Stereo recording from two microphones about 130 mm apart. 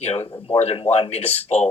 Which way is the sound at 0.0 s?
50° left (ahead or behind).